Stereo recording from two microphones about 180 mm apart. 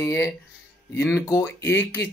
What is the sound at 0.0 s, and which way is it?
Speech, 15° left (ahead or behind).